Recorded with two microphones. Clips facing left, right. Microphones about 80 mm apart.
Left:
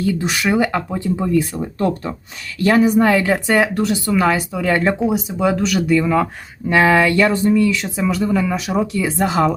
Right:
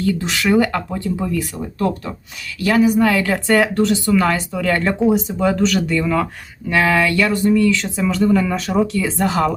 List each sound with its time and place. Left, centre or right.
0.0 s speech: centre
1.3 s speech: left
3.0 s speech: left
6.7 s speech: left; by 8.9 s centre
8.9 s speech: centre